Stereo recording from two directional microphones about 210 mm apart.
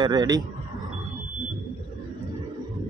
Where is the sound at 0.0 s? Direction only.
20° right (ahead or behind).